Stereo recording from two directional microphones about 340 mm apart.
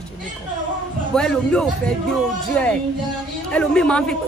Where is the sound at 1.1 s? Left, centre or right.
Centre.